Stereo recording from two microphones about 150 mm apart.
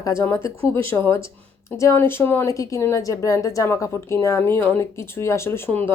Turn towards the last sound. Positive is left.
turn(degrees=10)  # may be behind; listen again after turning